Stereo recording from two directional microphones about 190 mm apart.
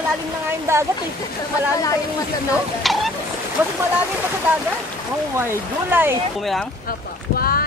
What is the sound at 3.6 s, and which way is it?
Speech, 10° right (ahead or behind).